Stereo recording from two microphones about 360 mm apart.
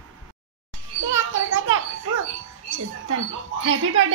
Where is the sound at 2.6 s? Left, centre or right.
Right.